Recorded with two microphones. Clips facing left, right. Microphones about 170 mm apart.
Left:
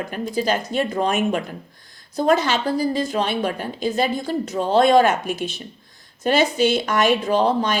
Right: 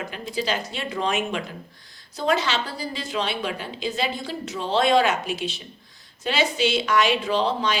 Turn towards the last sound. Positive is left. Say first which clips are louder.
# left 4 dB
turn(degrees=50)  # may be behind; listen again after turning